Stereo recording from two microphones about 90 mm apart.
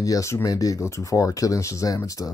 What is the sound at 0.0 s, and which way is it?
Speech, 35° left (ahead or behind).